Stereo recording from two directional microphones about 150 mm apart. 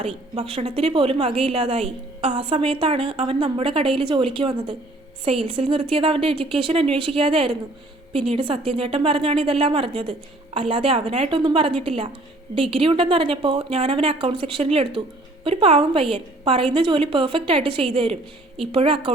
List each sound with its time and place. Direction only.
0.3 s a woman's voice: 40° right (ahead or behind)